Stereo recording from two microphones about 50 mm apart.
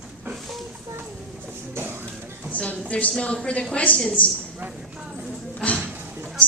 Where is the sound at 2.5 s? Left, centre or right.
Left.